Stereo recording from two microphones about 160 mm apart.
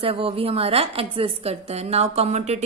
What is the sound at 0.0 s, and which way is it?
A woman's voice, 35° right (ahead or behind).